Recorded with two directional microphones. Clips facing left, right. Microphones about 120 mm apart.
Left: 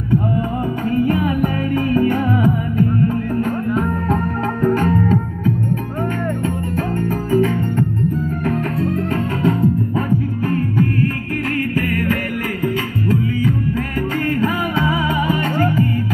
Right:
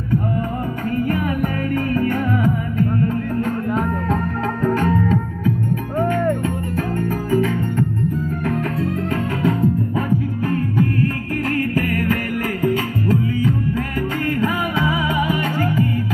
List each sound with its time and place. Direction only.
0.9 s music: 15° left (ahead or behind)
3.3 s music: 5° left (ahead or behind)
7.2 s music: centre (ahead or behind)
9.1 s music: 5° right (ahead or behind)
11.5 s music: 35° right (ahead or behind)
14.3 s music: 15° right (ahead or behind)